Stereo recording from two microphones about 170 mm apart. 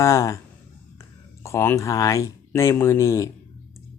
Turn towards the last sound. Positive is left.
turn(degrees=20)  # may be behind; listen again after turning